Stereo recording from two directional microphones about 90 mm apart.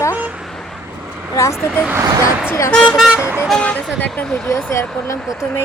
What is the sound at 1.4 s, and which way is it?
Speech, 35° left (ahead or behind).